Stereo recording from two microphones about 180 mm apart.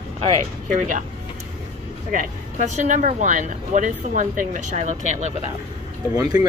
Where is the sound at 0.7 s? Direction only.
45° right (ahead or behind).